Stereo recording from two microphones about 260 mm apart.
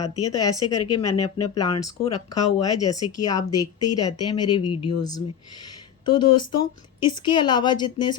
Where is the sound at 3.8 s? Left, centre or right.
Left.